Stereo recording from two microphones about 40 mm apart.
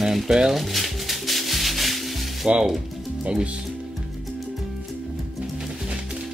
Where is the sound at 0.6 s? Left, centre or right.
Centre.